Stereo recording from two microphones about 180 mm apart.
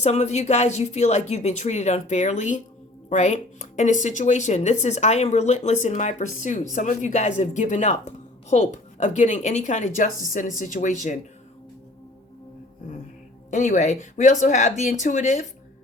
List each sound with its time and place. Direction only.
0.0 s a woman's voice: 40° left (ahead or behind)
13.5 s a woman's voice: 40° left (ahead or behind)